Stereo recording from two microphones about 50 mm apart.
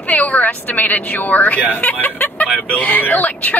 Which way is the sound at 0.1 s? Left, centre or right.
Left.